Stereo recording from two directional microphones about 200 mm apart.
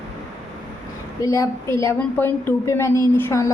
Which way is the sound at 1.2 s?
15° left (ahead or behind).